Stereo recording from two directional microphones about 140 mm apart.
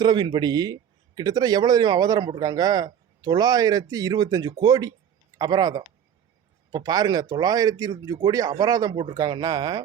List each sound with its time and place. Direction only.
0.0 s speech: 35° right (ahead or behind)